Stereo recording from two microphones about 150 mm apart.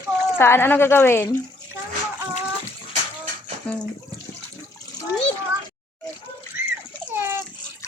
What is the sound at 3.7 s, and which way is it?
Speech, 5° left (ahead or behind).